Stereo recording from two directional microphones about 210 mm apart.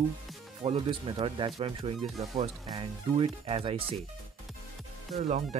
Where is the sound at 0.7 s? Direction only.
25° right (ahead or behind).